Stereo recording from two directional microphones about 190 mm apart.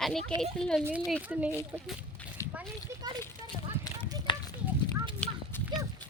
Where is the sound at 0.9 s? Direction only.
10° right (ahead or behind).